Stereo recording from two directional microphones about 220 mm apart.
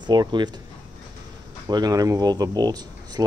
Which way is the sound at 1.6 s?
15° right (ahead or behind).